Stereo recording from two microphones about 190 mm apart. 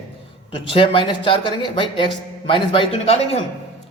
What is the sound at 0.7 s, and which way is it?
A man's voice, 30° left (ahead or behind).